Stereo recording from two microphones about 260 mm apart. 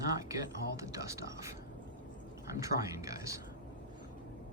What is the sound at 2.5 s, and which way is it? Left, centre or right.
Speech, centre.